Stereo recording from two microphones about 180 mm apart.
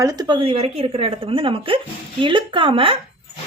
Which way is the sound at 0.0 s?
20° right (ahead or behind).